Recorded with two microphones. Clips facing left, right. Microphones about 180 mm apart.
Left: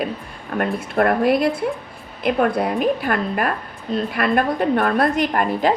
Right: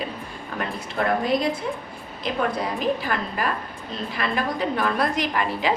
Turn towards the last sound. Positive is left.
turn(degrees=50)  # may be behind; listen again after turning